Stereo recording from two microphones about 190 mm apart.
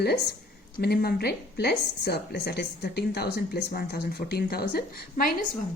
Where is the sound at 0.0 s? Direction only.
60° left (ahead or behind).